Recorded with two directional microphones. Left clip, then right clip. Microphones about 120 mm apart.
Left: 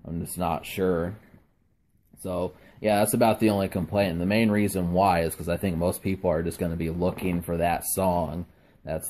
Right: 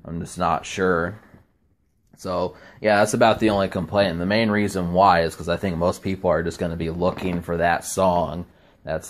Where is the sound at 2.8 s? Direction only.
25° left (ahead or behind).